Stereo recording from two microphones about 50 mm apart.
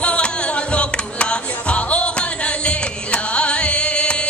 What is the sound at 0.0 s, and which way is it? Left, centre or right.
Music, left.